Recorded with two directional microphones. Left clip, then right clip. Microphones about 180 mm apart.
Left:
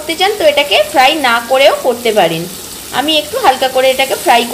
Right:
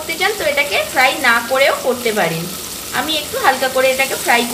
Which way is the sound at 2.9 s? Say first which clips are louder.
Left 6 dB; 30° left (ahead or behind).